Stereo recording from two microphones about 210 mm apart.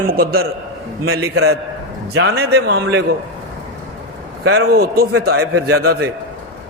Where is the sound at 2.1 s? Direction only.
50° right (ahead or behind).